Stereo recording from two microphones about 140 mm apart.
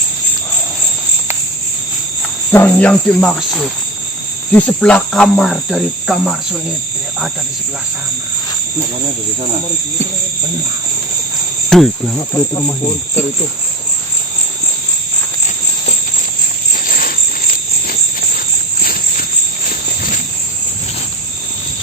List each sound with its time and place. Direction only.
2.5 s cricket: 15° left (ahead or behind); by 6.6 s centre (ahead or behind)
11.7 s cricket: 5° left (ahead or behind)
16.7 s a sound: 75° left (ahead or behind)
18.8 s cricket: 90° left